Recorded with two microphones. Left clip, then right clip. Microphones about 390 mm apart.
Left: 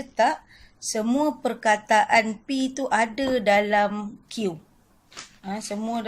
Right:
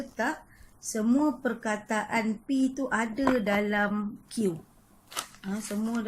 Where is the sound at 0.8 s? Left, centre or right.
Centre.